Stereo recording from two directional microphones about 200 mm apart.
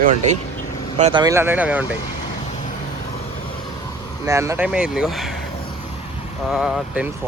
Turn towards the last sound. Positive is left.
turn(degrees=-5)  # may be behind; listen again after turning